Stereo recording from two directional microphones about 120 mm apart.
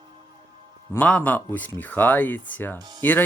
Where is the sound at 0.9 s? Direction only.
15° left (ahead or behind).